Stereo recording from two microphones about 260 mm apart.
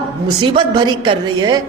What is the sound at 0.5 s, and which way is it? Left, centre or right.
A woman's voice, centre.